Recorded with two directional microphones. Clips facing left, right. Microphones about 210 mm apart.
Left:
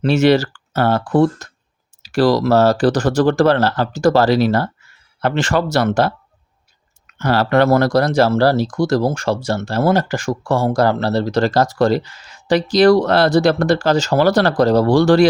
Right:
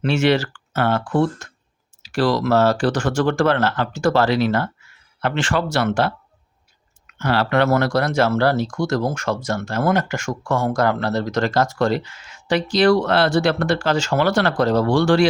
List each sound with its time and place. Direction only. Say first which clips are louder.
0.0 s speech: left 5 dB; 40° left (ahead or behind)